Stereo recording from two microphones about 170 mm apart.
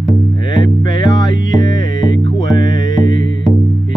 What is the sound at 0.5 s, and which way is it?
Music, 25° left (ahead or behind).